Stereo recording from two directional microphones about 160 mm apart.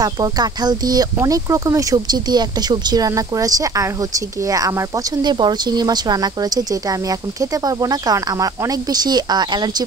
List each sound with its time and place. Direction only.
0.0 s speech: 25° right (ahead or behind)